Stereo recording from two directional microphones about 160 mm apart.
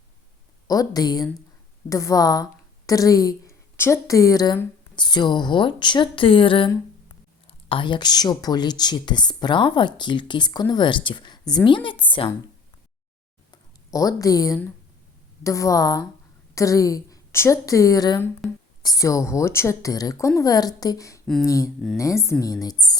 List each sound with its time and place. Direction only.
0.7 s a woman's voice: 25° left (ahead or behind)
7.7 s a woman's voice: 30° left (ahead or behind)
13.5 s a sound: 20° left (ahead or behind)
15.4 s a woman's voice: 20° left (ahead or behind)